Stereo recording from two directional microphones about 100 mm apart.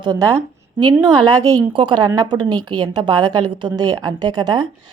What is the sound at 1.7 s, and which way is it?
A woman's voice, 55° right (ahead or behind).